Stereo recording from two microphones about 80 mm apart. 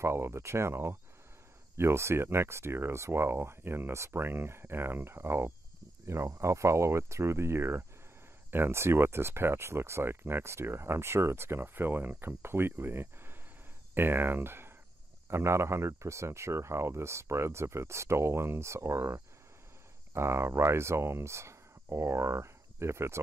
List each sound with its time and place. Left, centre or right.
0.0 s speech: right